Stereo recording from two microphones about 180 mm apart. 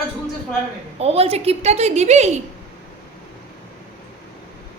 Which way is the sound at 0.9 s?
35° right (ahead or behind).